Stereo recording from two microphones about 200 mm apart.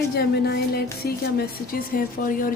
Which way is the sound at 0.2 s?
50° left (ahead or behind).